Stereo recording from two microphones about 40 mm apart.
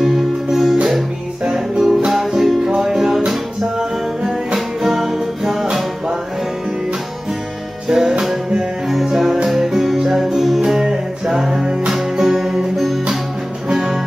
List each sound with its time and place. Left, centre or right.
0.0 s music: centre
7.9 s music: centre